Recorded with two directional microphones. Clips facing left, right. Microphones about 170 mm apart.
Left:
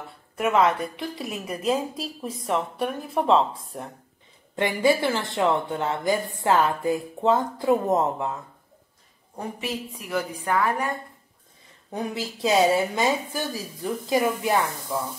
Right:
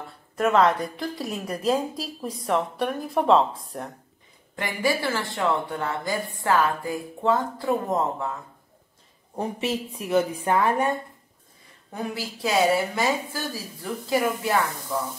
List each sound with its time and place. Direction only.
0.4 s a woman's voice: 5° left (ahead or behind)
4.6 s a woman's voice: 20° left (ahead or behind)
9.3 s a woman's voice: 25° right (ahead or behind)
11.9 s a woman's voice: 20° left (ahead or behind)